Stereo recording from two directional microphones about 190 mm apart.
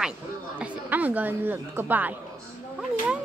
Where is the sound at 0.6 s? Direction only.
10° right (ahead or behind).